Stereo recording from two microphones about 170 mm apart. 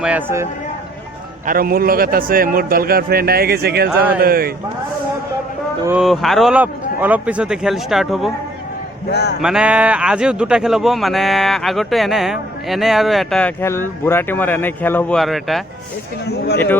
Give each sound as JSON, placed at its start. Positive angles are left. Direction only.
{"t": 0.0, "sound": "a man's voice", "side_deg": -10}
{"t": 1.5, "sound": "a man's voice", "side_deg": -60}
{"t": 6.0, "sound": "a man's voice", "side_deg": 0}
{"t": 9.0, "sound": "speech", "side_deg": 75}
{"t": 9.4, "sound": "a man's voice", "side_deg": -5}